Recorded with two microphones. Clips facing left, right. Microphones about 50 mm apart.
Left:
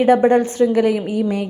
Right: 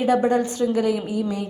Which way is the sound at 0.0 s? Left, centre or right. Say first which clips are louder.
Left 6 dB; left.